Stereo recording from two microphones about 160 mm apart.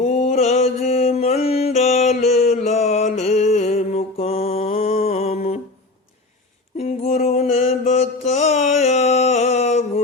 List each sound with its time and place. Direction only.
0.0 s mantra: 45° left (ahead or behind)
0.9 s mantra: 40° left (ahead or behind)
6.7 s mantra: 40° left (ahead or behind)